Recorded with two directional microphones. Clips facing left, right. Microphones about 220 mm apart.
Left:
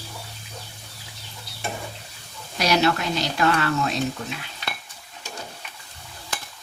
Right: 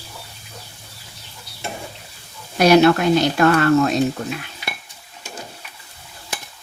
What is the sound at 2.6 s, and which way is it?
Speech, 55° right (ahead or behind).